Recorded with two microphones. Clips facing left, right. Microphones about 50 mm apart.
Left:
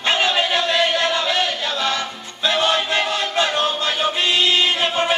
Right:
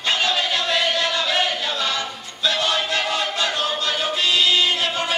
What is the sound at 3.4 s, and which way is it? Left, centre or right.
Music, left.